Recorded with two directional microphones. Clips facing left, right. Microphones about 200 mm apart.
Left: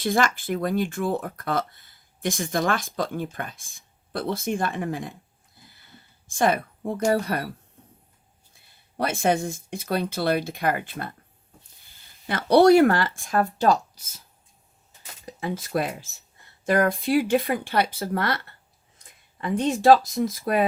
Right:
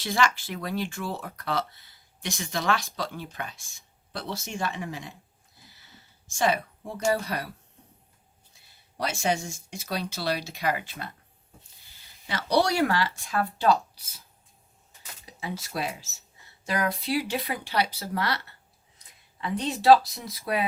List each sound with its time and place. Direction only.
0.0 s speech: 50° left (ahead or behind)
5.6 s a sound: 55° left (ahead or behind)
7.1 s speech: 55° left (ahead or behind)
8.5 s speech: 55° left (ahead or behind)
12.3 s speech: 55° left (ahead or behind)
15.3 s speech: 50° left (ahead or behind)